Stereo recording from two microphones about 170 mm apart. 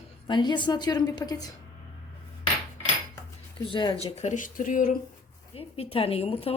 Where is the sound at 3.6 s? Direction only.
30° left (ahead or behind); by 4.9 s 50° left (ahead or behind).